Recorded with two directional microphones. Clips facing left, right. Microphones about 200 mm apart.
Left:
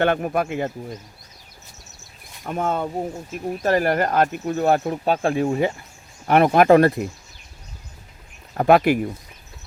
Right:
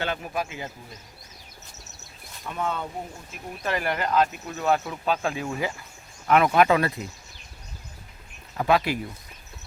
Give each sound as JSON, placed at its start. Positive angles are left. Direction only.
{"t": 0.0, "sound": "speech", "side_deg": 55}
{"t": 2.4, "sound": "speech", "side_deg": 45}
{"t": 5.5, "sound": "speech", "side_deg": 30}
{"t": 8.5, "sound": "speech", "side_deg": 55}